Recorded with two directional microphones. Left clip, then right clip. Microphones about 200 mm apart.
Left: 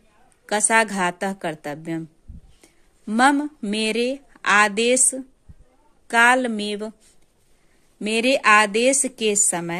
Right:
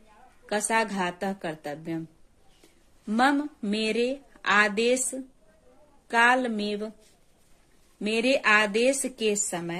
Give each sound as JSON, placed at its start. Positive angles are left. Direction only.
{"t": 0.5, "sound": "a woman's voice", "side_deg": 35}
{"t": 3.1, "sound": "a woman's voice", "side_deg": 30}
{"t": 8.0, "sound": "a woman's voice", "side_deg": 30}